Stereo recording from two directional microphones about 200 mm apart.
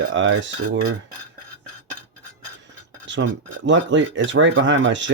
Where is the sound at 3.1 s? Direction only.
65° right (ahead or behind).